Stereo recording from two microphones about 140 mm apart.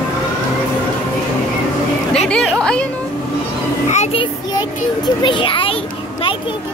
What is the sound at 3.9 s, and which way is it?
Child singing, 55° left (ahead or behind).